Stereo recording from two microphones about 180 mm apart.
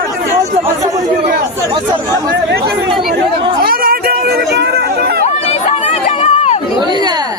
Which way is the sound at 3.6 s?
55° right (ahead or behind).